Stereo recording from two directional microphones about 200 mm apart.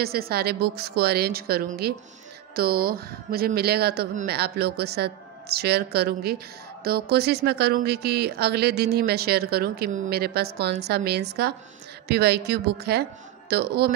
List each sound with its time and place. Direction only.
0.0 s a woman's voice: 50° right (ahead or behind)